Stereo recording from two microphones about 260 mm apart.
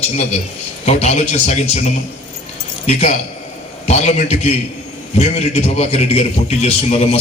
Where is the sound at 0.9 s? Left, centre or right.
Left.